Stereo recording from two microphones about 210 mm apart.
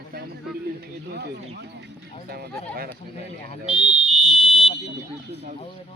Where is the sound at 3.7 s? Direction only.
5° right (ahead or behind).